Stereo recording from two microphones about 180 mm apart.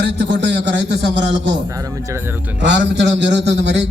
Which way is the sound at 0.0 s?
75° right (ahead or behind).